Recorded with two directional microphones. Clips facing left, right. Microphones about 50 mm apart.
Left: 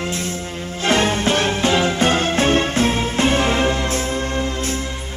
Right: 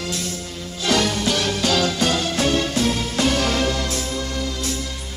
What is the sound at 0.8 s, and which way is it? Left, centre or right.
Music, left.